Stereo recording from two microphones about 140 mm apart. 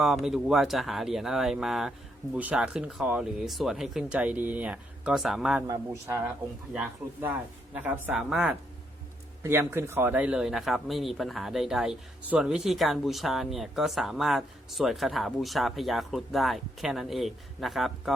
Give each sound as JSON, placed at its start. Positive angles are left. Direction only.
{"t": 0.0, "sound": "speech", "side_deg": 0}
{"t": 5.6, "sound": "speech", "side_deg": -25}
{"t": 9.4, "sound": "speech", "side_deg": -15}